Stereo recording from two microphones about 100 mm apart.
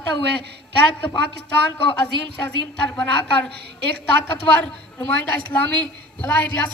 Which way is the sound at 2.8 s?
10° left (ahead or behind).